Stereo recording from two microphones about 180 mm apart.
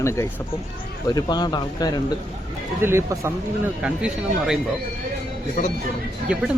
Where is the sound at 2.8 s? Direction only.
15° right (ahead or behind).